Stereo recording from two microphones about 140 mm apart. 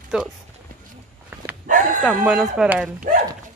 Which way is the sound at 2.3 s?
5° right (ahead or behind).